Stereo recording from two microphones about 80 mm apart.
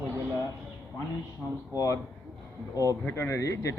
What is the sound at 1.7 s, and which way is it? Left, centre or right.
Speech, left.